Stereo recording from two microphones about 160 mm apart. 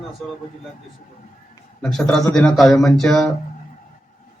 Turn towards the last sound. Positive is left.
turn(degrees=0)  # may be behind; listen again after turning